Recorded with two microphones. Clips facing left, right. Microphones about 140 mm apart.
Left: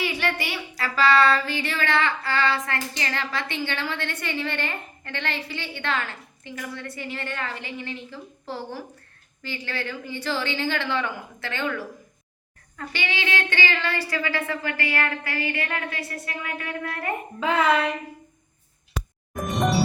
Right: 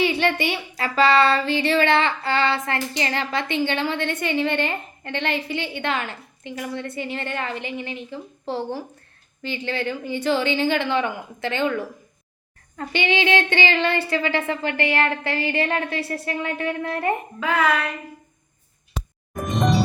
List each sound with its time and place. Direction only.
0.0 s speech: 25° right (ahead or behind)
17.4 s a sound: 25° left (ahead or behind)
19.5 s music: 10° left (ahead or behind)